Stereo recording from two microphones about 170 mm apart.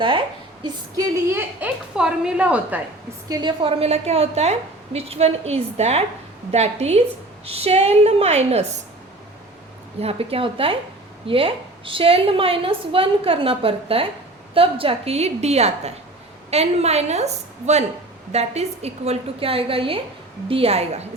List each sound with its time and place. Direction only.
1.3 s a woman's voice: 10° right (ahead or behind)
3.2 s a woman's voice: 25° right (ahead or behind)
10.0 s a woman's voice: 35° right (ahead or behind)